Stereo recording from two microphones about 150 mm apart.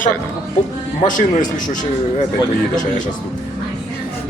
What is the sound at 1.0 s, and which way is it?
Speech, 60° left (ahead or behind).